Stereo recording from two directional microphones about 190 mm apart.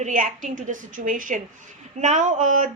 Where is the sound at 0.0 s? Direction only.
40° right (ahead or behind).